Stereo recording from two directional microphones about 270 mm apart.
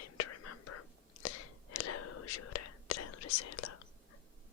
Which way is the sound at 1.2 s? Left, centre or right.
Left.